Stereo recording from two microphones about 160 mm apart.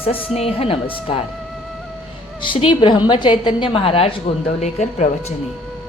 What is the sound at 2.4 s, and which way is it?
A woman's voice, 30° left (ahead or behind).